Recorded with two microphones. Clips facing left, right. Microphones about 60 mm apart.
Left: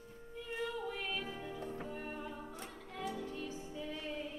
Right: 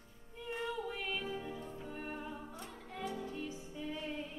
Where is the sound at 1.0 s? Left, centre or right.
Centre.